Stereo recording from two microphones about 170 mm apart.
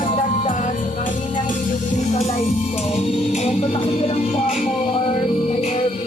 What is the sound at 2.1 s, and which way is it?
Music, 40° left (ahead or behind).